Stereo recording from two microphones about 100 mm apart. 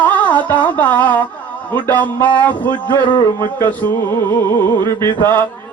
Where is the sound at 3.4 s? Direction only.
20° left (ahead or behind).